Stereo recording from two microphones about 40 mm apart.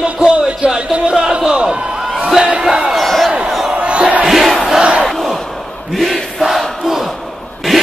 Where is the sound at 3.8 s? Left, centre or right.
Right.